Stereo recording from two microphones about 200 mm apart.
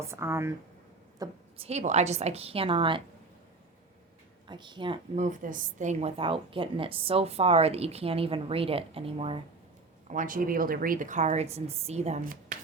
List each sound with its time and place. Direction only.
0.0 s speech: 15° right (ahead or behind)
1.5 s a woman's voice: 30° right (ahead or behind)
4.4 s a woman's voice: 25° right (ahead or behind)
5.1 s a woman's voice: 40° right (ahead or behind)
10.1 s a woman's voice: 40° right (ahead or behind)